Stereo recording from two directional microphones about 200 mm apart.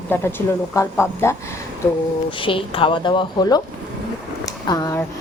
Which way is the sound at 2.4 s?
25° left (ahead or behind).